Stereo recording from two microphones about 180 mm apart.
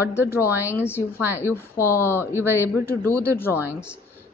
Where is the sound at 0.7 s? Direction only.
10° left (ahead or behind).